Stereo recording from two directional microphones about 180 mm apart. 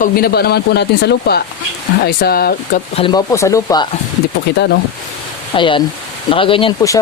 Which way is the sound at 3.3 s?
15° left (ahead or behind).